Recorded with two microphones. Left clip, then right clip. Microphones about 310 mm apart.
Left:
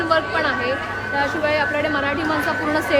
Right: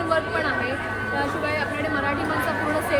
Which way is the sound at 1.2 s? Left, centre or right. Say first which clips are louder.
Left 7 dB; left.